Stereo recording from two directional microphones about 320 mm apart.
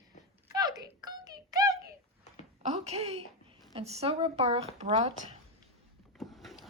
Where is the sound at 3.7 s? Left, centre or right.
Centre.